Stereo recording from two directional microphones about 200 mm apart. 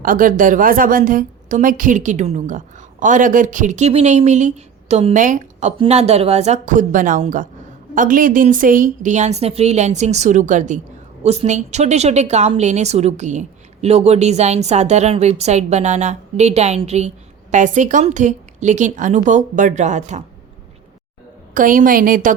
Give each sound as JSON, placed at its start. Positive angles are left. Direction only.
{"t": 0.0, "sound": "a woman's voice", "side_deg": -45}
{"t": 21.5, "sound": "a woman's voice", "side_deg": -45}